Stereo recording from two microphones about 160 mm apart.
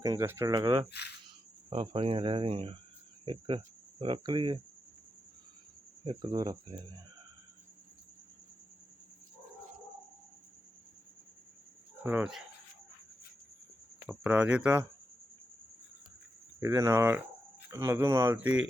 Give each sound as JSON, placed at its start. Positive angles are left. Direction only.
{"t": 0.0, "sound": "speech", "side_deg": -20}
{"t": 0.9, "sound": "speech", "side_deg": 90}
{"t": 1.7, "sound": "speech", "side_deg": -35}
{"t": 6.1, "sound": "speech", "side_deg": -25}
{"t": 12.0, "sound": "speech", "side_deg": -10}
{"t": 14.1, "sound": "speech", "side_deg": -10}
{"t": 16.6, "sound": "speech", "side_deg": -15}